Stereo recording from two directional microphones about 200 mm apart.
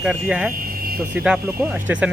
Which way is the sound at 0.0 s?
5° right (ahead or behind).